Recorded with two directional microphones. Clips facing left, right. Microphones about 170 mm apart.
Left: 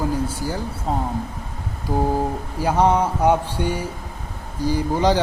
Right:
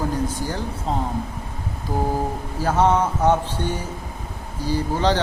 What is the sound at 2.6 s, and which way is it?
Speech, 15° left (ahead or behind).